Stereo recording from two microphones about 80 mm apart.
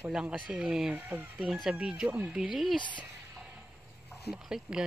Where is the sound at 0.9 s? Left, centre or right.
Centre.